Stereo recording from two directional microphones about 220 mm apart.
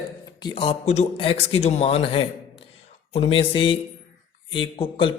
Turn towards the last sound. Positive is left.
turn(degrees=25)  # may be behind; listen again after turning